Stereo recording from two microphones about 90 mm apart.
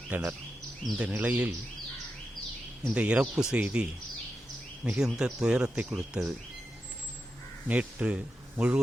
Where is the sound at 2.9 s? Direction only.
10° right (ahead or behind).